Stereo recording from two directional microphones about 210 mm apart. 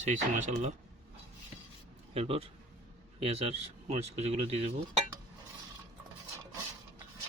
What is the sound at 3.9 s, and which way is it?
Speech, 30° right (ahead or behind).